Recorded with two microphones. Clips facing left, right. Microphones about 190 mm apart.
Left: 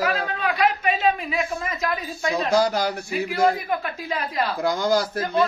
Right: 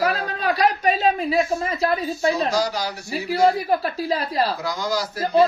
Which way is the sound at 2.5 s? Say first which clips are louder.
Left 3 dB; 55° left (ahead or behind).